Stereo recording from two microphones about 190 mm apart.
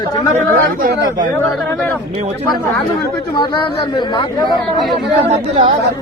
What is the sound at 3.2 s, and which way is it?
Speech, 25° left (ahead or behind).